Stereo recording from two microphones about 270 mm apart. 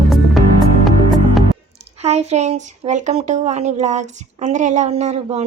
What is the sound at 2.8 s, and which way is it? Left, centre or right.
Speech, right.